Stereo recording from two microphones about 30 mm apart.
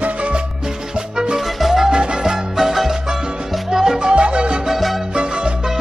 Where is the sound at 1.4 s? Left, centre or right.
Centre.